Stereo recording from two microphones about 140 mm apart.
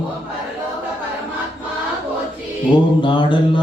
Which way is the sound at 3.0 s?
35° left (ahead or behind).